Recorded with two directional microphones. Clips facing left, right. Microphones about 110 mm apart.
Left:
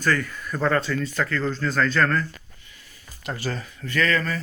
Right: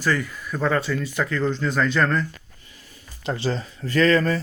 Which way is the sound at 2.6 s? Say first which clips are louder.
Right 2 dB; 35° right (ahead or behind).